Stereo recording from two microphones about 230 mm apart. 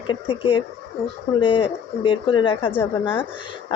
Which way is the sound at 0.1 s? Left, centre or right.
Left.